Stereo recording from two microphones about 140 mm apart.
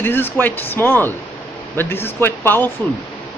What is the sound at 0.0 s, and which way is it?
Speech, 15° left (ahead or behind).